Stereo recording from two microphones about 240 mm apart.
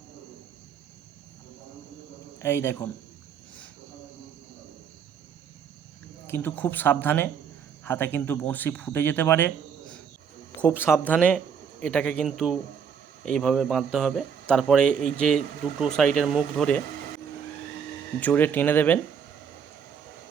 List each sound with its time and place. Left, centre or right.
2.4 s speech: centre
6.2 s speech: centre
10.6 s speech: centre
18.2 s speech: centre